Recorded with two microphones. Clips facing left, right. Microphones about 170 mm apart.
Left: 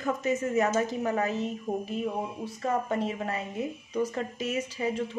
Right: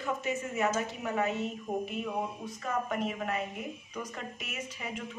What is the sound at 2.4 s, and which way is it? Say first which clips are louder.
Speech: left 5 dB; 30° left (ahead or behind).